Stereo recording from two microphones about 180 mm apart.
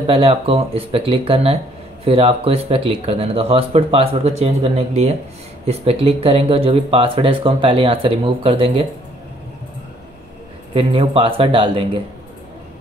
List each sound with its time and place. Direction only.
0.0 s speech: 30° right (ahead or behind)
10.7 s speech: 30° right (ahead or behind)